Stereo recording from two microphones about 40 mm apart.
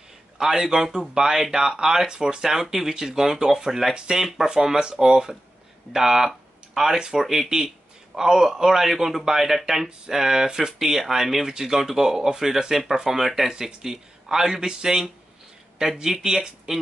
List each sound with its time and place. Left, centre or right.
0.4 s speech: centre